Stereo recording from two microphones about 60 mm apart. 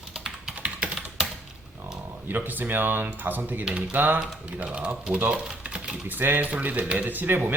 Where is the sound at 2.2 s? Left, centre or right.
Right.